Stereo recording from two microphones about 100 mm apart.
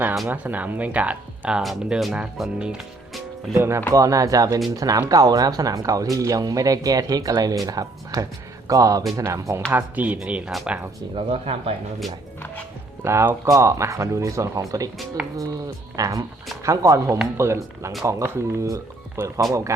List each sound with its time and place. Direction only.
0.3 s speech: 20° right (ahead or behind)
3.5 s speech: 25° right (ahead or behind)
9.7 s speech: 15° right (ahead or behind)
11.1 s speech: 90° right
13.1 s speech: 30° right (ahead or behind)
15.2 s speech: 10° right (ahead or behind)
16.0 s speech: 35° right (ahead or behind)
19.4 s speech: centre (ahead or behind)